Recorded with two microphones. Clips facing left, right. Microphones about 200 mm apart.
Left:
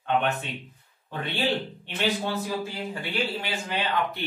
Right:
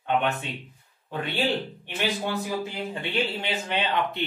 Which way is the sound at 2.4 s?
20° right (ahead or behind).